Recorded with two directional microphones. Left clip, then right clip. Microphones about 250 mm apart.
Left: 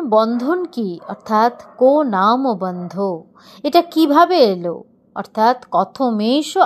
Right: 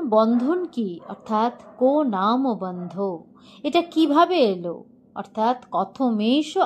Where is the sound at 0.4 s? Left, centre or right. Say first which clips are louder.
Left 4 dB; left.